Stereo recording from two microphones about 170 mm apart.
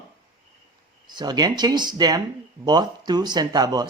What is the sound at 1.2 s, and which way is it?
Speech, 25° right (ahead or behind).